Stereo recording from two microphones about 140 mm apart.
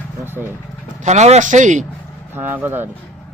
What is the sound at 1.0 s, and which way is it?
Speech, 55° right (ahead or behind).